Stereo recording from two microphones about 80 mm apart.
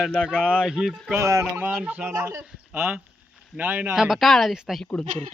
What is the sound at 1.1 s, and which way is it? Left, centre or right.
Speech, right.